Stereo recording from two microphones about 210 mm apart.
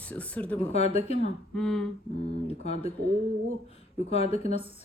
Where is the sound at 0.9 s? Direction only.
30° left (ahead or behind).